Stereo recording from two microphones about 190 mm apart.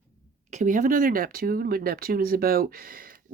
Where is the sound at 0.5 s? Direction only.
45° right (ahead or behind).